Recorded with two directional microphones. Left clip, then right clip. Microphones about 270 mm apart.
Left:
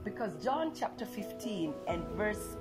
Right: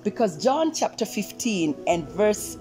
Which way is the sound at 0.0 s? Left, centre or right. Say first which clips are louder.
Right 13 dB; right.